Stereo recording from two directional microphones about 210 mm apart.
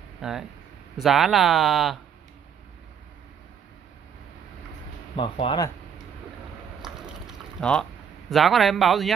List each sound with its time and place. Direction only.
0.2 s speech: centre (ahead or behind)
5.1 s speech: 25° left (ahead or behind)
7.6 s speech: centre (ahead or behind)